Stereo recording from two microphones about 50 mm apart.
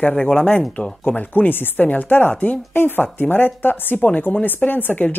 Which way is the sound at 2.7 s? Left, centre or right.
Left.